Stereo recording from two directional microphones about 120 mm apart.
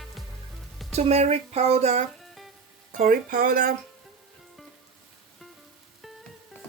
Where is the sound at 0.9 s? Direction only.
60° right (ahead or behind).